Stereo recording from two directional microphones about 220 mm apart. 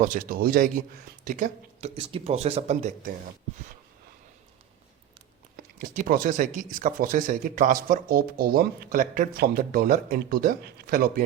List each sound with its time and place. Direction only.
0.0 s speech: 35° right (ahead or behind)
5.5 s speech: 40° right (ahead or behind)